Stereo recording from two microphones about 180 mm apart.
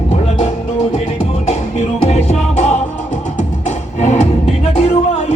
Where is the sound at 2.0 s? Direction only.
35° left (ahead or behind).